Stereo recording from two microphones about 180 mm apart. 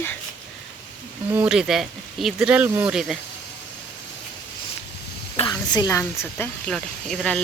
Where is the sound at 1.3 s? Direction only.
5° right (ahead or behind).